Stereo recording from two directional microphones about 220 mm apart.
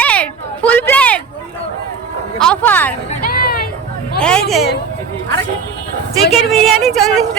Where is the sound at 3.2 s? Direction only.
40° left (ahead or behind).